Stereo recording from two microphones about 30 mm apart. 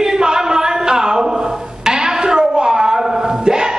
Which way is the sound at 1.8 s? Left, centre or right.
Right.